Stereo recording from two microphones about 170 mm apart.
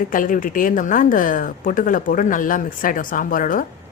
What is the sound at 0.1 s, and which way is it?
Speech, 50° left (ahead or behind).